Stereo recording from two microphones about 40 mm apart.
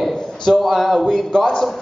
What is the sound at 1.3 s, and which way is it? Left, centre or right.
Speech, centre.